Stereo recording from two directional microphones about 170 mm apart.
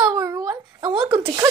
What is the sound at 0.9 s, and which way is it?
Speech, 25° right (ahead or behind).